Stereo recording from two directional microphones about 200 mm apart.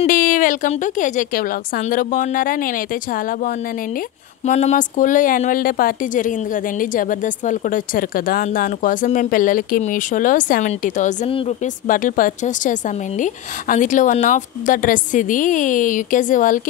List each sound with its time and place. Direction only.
0.0 s a woman's voice: 40° left (ahead or behind)